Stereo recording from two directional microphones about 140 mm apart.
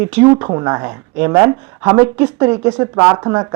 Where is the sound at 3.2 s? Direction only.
25° right (ahead or behind).